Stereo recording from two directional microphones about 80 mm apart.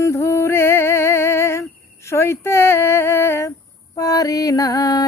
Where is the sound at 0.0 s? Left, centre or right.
Left.